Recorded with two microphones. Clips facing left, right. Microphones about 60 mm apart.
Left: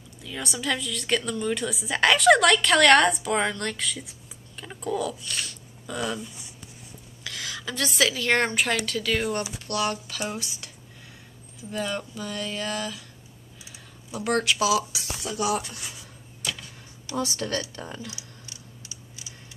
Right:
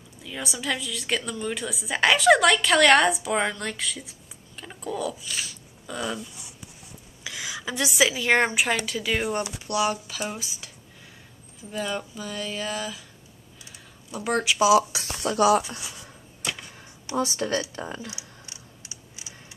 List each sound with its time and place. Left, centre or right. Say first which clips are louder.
0.2 s a woman's voice: left 1 dB; centre
7.2 s a woman's voice: right 1 dB; centre
11.7 s a woman's voice: even; centre
14.2 s a woman's voice: left 1 dB; centre
14.6 s speech: right 5 dB; right
15.1 s speech: right 7 dB; right
15.9 s a sound: right 1 dB; right